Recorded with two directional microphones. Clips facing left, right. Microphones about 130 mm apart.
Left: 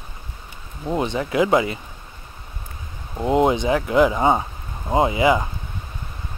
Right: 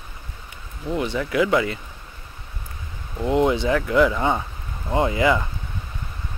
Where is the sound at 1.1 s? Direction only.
25° left (ahead or behind).